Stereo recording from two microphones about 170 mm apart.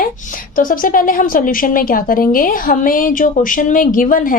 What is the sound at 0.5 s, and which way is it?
A woman's voice, 55° left (ahead or behind).